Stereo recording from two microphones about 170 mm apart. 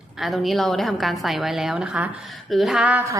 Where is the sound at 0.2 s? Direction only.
Centre (ahead or behind).